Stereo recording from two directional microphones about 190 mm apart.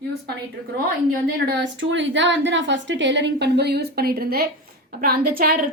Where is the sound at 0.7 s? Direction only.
55° right (ahead or behind).